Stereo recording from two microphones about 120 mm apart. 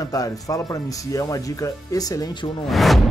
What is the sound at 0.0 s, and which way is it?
Speech, 30° left (ahead or behind).